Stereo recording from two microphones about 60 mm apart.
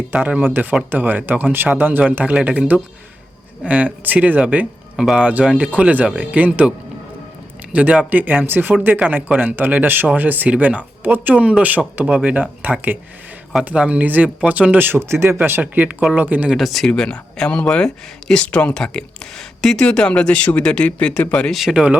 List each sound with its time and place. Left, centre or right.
0.1 s speech: right
4.9 s speech: centre
5.2 s a man's voice: right
15.6 s speech: right
16.6 s speech: centre
16.9 s speech: centre
21.5 s speech: centre